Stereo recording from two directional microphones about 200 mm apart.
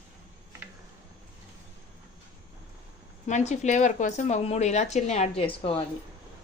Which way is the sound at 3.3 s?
35° left (ahead or behind).